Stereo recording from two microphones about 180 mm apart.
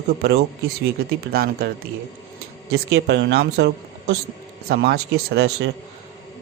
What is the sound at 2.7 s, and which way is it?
Speech, 70° right (ahead or behind).